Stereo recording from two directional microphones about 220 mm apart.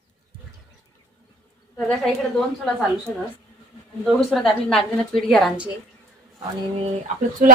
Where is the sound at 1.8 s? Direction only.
Centre (ahead or behind).